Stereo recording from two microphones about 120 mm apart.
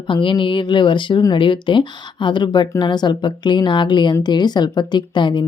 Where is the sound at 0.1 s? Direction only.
45° left (ahead or behind).